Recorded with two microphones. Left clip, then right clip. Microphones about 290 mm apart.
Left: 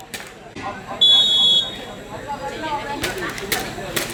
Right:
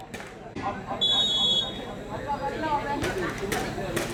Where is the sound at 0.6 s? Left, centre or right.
Centre.